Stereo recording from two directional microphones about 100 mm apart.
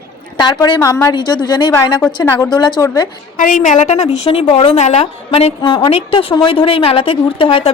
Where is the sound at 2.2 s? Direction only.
25° left (ahead or behind).